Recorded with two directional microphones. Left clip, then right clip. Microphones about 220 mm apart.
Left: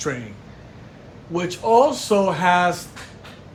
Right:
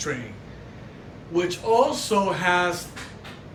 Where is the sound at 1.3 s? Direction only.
15° left (ahead or behind).